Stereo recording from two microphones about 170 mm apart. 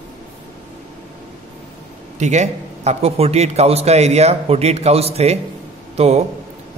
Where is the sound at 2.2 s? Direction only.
40° right (ahead or behind).